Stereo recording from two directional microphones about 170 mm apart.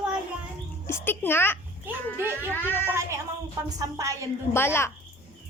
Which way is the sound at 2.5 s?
10° left (ahead or behind).